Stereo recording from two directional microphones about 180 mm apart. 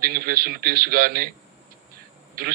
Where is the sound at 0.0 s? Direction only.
55° right (ahead or behind).